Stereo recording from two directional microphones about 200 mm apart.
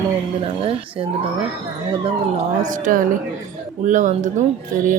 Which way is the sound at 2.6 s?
40° right (ahead or behind).